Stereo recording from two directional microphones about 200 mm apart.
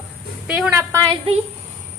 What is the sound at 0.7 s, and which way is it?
Speech, 15° right (ahead or behind).